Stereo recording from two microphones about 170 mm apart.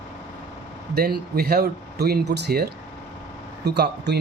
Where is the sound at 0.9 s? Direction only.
65° right (ahead or behind).